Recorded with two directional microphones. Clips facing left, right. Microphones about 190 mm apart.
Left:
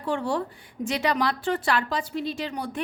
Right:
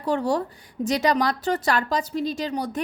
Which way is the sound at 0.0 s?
40° right (ahead or behind).